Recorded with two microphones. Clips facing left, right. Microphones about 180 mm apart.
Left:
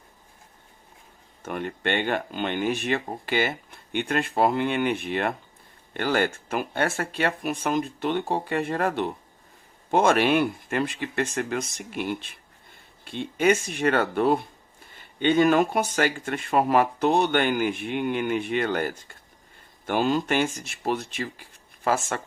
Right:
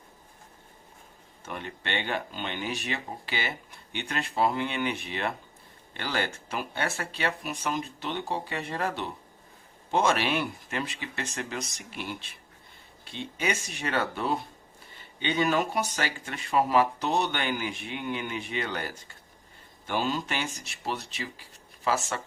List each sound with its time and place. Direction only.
1.4 s speech: 50° left (ahead or behind)